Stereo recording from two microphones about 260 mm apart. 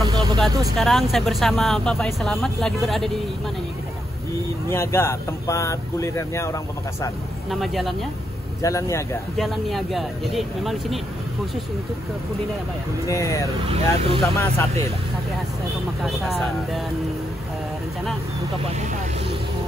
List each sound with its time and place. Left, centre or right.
0.0 s vehicle: centre
0.5 s speech: centre
0.7 s speech: centre
4.6 s speech: centre
7.6 s speech: centre
8.6 s speech: centre
9.4 s speech: centre
13.0 s speech: centre
13.7 s speech: right
14.3 s speech: centre
16.0 s speech: centre